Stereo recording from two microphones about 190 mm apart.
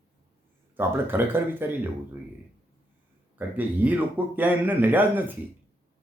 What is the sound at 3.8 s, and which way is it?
Speech, 10° right (ahead or behind).